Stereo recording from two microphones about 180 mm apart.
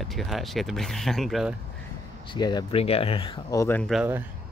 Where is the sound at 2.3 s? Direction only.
25° left (ahead or behind).